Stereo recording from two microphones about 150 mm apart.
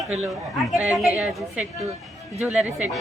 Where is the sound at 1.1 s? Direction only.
10° right (ahead or behind).